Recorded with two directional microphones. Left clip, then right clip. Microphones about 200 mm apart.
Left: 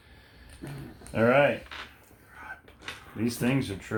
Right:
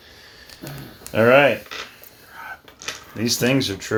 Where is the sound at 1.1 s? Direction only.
45° right (ahead or behind).